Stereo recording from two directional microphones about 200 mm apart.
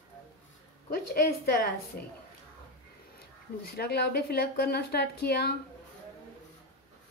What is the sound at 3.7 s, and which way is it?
A woman's voice, 55° left (ahead or behind).